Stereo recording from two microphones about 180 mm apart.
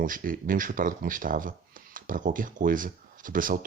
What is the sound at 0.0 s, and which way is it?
Speech, 50° right (ahead or behind).